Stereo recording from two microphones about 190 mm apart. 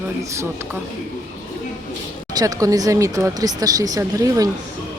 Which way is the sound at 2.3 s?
20° right (ahead or behind).